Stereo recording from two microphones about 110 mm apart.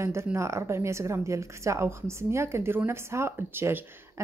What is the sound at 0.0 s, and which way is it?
A woman's voice, 25° right (ahead or behind).